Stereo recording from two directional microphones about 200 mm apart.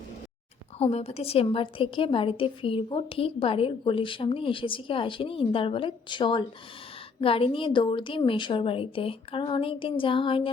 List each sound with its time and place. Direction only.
0.8 s a woman's voice: 30° left (ahead or behind)